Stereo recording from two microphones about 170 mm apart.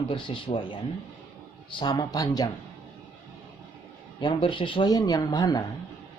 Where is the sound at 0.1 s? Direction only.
30° left (ahead or behind).